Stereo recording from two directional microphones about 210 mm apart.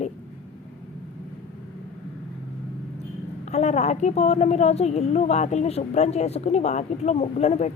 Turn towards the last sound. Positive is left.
turn(degrees=30)  # may be behind; listen again after turning